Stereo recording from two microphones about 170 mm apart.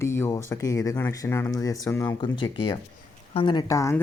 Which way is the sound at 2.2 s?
30° left (ahead or behind).